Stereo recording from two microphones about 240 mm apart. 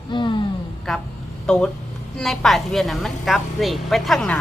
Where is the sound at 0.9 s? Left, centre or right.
Centre.